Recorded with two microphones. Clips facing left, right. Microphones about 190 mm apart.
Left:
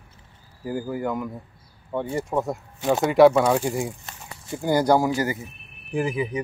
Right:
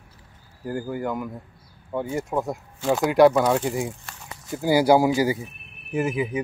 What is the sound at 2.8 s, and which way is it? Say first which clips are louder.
Speech: even; 20° left (ahead or behind).